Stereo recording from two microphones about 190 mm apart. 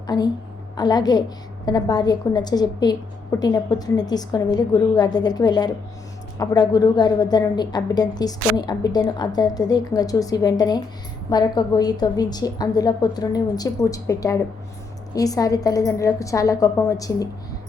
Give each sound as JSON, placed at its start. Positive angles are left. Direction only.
{"t": 0.8, "sound": "a woman's voice", "side_deg": 20}